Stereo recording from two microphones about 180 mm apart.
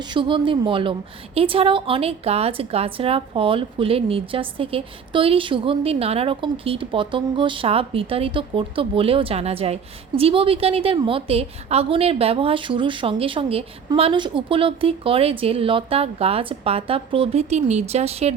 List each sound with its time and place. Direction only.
0.1 s a woman's voice: 25° right (ahead or behind)